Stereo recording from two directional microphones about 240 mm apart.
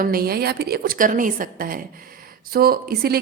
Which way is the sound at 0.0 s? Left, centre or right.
Right.